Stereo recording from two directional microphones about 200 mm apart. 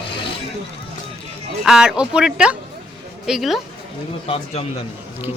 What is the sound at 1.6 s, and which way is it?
Speech, 5° right (ahead or behind).